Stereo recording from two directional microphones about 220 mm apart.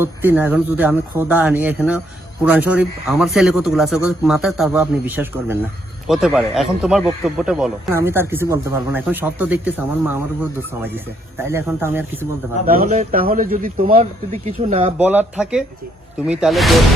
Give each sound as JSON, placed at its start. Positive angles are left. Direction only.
{"t": 0.0, "sound": "speech", "side_deg": -10}
{"t": 12.6, "sound": "a man's voice", "side_deg": -40}
{"t": 13.9, "sound": "speech", "side_deg": -30}
{"t": 14.9, "sound": "speech", "side_deg": -5}